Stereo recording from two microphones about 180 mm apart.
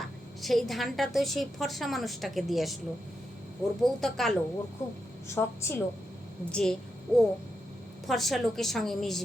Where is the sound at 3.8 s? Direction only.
Centre (ahead or behind).